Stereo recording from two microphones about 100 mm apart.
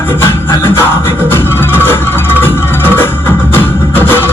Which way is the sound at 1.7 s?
20° left (ahead or behind).